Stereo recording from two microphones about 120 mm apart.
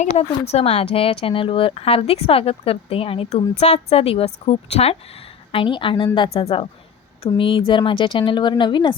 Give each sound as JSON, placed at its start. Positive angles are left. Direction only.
{"t": 0.0, "sound": "speech", "side_deg": 60}
{"t": 5.5, "sound": "speech", "side_deg": 45}
{"t": 7.3, "sound": "speech", "side_deg": 45}